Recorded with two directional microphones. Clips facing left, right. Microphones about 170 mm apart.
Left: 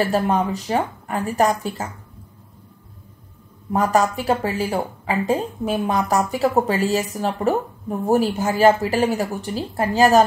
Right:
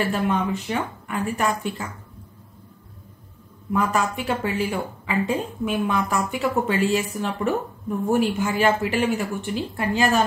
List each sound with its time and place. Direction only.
0.0 s a woman's voice: 40° left (ahead or behind)
3.7 s a woman's voice: 40° left (ahead or behind)